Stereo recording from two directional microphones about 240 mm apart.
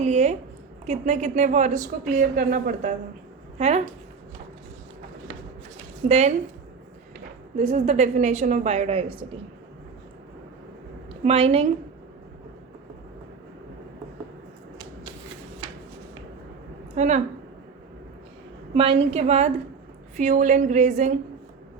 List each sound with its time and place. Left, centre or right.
0.0 s a woman's voice: right
6.1 s a woman's voice: right
7.5 s a woman's voice: right
11.1 s a woman's voice: right
16.9 s a woman's voice: right
18.7 s a woman's voice: right